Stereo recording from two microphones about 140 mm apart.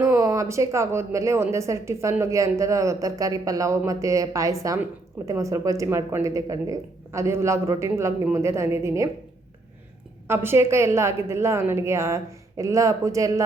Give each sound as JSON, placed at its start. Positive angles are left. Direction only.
{"t": 0.0, "sound": "speech", "side_deg": -20}
{"t": 10.2, "sound": "speech", "side_deg": -15}